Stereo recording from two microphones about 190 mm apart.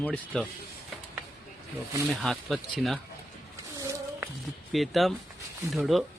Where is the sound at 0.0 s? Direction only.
5° left (ahead or behind).